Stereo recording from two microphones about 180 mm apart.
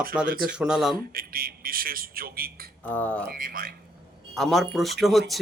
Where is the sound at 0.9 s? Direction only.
55° right (ahead or behind).